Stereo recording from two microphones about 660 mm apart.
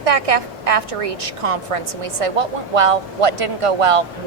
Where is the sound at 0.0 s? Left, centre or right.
Right.